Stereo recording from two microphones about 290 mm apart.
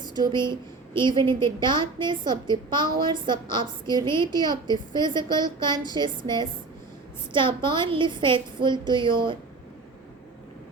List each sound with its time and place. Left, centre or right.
0.0 s a woman's voice: centre